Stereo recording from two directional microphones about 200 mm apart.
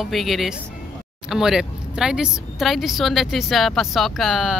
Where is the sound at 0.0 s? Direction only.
Centre (ahead or behind).